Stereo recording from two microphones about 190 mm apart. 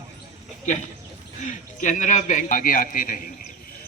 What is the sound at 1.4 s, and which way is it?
A man's voice, 40° left (ahead or behind).